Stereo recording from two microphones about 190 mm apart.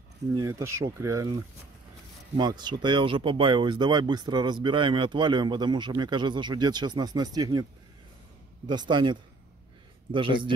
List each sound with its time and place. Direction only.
0.4 s speech: 15° right (ahead or behind)
8.6 s speech: 25° right (ahead or behind)